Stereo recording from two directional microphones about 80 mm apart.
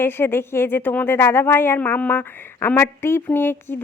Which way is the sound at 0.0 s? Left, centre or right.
Left.